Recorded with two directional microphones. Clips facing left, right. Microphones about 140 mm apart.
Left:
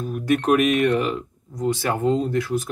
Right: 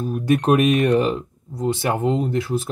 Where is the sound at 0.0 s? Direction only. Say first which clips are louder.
Right 2 dB; 25° right (ahead or behind).